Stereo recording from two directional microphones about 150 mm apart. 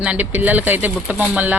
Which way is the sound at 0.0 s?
10° right (ahead or behind).